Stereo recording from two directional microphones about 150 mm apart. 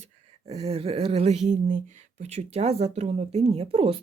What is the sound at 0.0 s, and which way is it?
Speech, 45° right (ahead or behind).